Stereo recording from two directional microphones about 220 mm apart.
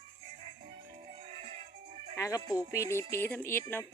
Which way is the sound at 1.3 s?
25° right (ahead or behind).